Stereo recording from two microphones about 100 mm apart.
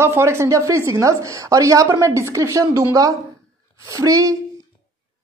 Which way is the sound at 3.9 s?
35° right (ahead or behind).